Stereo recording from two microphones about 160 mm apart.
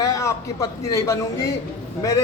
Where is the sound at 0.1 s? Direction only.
20° left (ahead or behind).